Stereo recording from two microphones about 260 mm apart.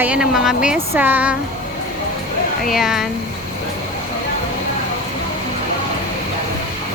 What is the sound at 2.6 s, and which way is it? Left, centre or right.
Speech, centre.